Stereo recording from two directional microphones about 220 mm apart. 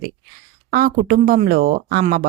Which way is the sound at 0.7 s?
40° right (ahead or behind).